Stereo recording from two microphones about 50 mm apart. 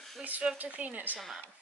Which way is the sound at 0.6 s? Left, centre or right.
Right.